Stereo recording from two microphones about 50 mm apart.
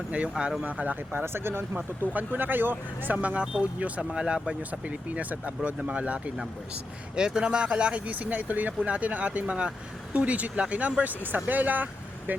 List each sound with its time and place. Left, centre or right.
0.1 s speech: right
1.1 s speech: right
2.1 s speech: right
3.2 s speech: right
4.1 s speech: centre
4.7 s speech: right
7.2 s speech: centre; by 11.9 s right